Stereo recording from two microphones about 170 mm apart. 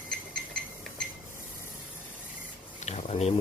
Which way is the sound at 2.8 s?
40° left (ahead or behind).